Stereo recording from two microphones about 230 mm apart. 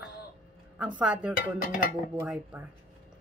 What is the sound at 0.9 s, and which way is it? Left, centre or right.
Speech, centre.